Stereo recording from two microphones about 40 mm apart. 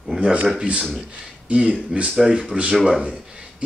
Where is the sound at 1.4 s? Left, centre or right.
Right.